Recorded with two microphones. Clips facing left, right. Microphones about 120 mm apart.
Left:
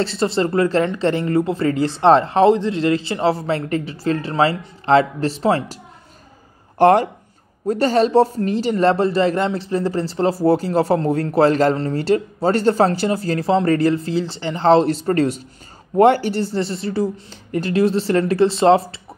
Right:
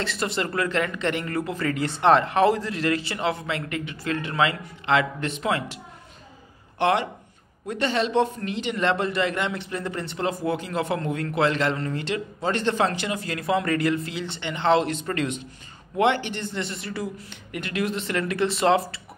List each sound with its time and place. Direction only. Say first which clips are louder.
0.0 s speech: left 8 dB; 30° left (ahead or behind)
6.8 s speech: left 9 dB; 40° left (ahead or behind)